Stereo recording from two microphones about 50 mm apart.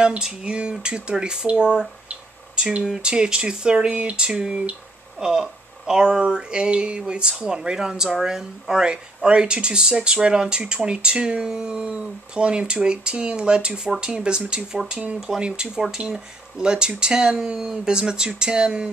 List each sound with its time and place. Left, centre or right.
0.0 s speech: centre